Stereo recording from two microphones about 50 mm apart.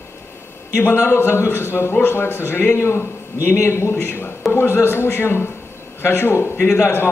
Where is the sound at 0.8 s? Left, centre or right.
Left.